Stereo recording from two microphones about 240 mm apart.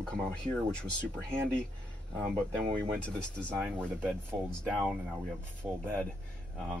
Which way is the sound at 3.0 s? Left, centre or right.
Centre.